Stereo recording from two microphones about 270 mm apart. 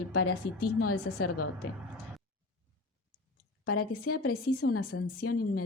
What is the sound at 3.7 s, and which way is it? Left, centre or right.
A woman's voice, left.